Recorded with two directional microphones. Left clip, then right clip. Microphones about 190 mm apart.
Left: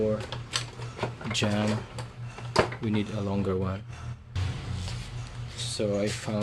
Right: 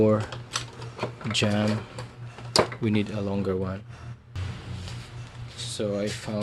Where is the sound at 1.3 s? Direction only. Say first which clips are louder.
Right 3 dB; 25° right (ahead or behind).